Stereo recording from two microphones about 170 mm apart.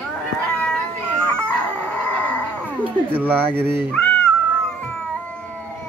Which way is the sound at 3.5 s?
65° right (ahead or behind).